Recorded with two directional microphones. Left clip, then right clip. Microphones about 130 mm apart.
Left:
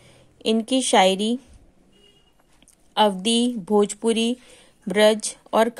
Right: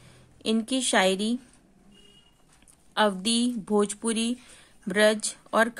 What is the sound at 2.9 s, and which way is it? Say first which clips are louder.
Speech: left 5 dB; 15° left (ahead or behind).